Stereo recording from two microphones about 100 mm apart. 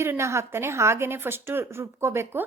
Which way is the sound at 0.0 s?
25° right (ahead or behind).